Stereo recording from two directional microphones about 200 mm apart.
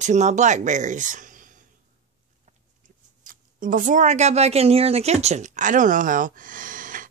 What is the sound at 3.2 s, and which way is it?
Speech, 45° right (ahead or behind).